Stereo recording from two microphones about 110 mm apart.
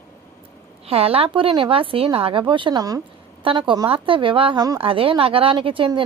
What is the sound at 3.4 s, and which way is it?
Speech, 50° right (ahead or behind).